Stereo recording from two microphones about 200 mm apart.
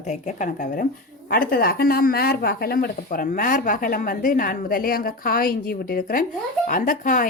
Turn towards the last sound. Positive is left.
turn(degrees=45)  # may be behind; listen again after turning